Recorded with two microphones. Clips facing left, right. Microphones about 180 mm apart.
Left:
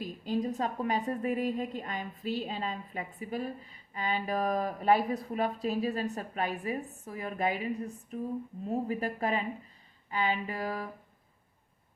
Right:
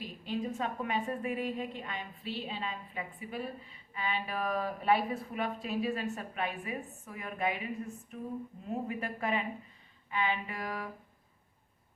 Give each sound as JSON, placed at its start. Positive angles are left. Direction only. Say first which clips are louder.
{"t": 0.0, "sound": "a woman's voice", "louder": "left 4 dB", "side_deg": 40}